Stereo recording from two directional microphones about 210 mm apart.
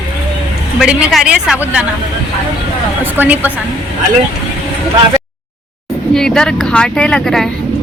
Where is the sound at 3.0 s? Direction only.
10° right (ahead or behind).